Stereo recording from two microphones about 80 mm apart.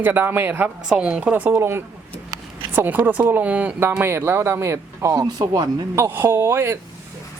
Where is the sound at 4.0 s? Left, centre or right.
Right.